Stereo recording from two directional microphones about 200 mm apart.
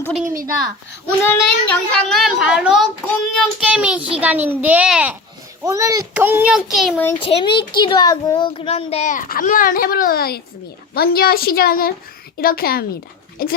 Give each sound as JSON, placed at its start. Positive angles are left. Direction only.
{"t": 0.0, "sound": "a woman's voice", "side_deg": 0}
{"t": 7.1, "sound": "a child's voice", "side_deg": 30}